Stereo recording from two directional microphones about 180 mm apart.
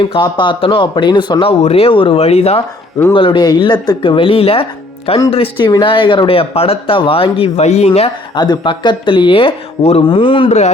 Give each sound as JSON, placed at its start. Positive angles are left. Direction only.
{"t": 0.1, "sound": "speech", "side_deg": 25}
{"t": 8.4, "sound": "speech", "side_deg": 25}